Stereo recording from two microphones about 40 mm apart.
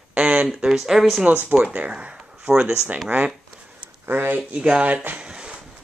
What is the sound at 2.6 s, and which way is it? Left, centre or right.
Speech, right.